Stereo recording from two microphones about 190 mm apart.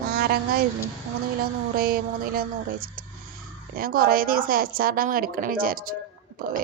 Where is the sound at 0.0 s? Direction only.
55° right (ahead or behind).